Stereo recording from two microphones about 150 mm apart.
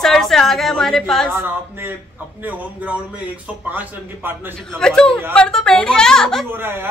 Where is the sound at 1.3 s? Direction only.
15° right (ahead or behind).